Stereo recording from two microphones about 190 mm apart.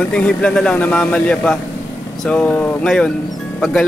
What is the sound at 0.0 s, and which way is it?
Speech, 5° left (ahead or behind).